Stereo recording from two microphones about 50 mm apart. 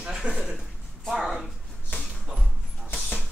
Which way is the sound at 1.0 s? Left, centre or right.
Centre.